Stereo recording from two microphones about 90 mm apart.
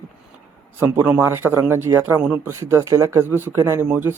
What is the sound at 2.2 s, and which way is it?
Speech, 15° right (ahead or behind).